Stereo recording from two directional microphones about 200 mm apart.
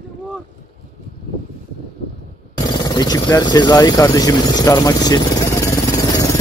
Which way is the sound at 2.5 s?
20° left (ahead or behind).